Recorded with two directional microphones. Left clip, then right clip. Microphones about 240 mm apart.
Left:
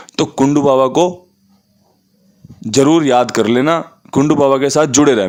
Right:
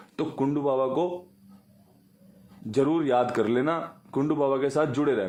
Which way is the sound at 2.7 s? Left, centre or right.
Left.